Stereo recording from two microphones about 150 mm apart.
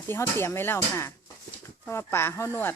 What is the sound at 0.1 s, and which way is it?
Speech, 15° left (ahead or behind).